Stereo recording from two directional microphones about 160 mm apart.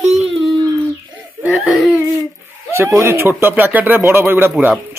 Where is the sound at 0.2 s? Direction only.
Centre (ahead or behind).